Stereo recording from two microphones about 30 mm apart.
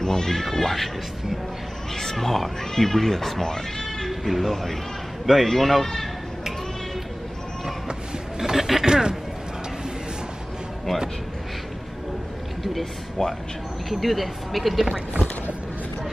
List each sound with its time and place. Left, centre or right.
0.0 s speech: centre
2.0 s speech: centre
4.1 s a man's voice: centre
8.4 s a sound: centre
8.8 s a sound: right
13.2 s speech: centre
13.8 s speech: centre